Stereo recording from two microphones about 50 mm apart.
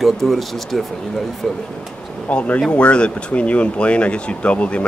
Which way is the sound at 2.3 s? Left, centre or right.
Left.